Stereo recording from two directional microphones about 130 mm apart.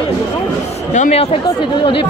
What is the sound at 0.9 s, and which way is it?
Speech, 70° left (ahead or behind).